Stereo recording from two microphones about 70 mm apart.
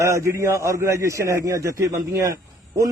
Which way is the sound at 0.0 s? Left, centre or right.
Right.